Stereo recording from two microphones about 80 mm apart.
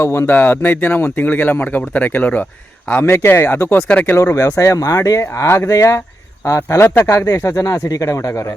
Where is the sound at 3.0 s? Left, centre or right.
Left.